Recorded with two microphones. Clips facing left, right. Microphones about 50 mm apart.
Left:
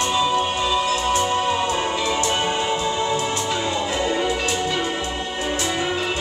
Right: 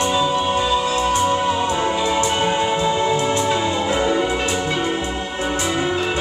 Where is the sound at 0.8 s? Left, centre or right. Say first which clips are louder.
Right 2 dB; right.